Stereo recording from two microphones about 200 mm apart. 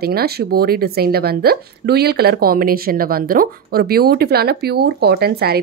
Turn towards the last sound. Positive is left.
turn(degrees=-50)  # may be behind; listen again after turning